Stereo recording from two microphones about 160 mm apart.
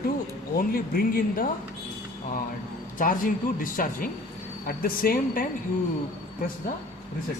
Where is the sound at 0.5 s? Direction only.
65° left (ahead or behind).